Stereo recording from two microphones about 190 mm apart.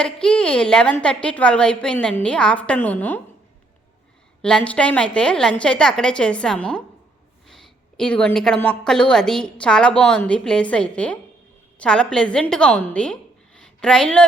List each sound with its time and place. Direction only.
0.0 s a woman's voice: 5° left (ahead or behind)
4.4 s a woman's voice: 5° left (ahead or behind)